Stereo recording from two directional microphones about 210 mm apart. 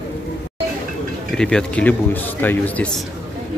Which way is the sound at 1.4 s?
5° left (ahead or behind).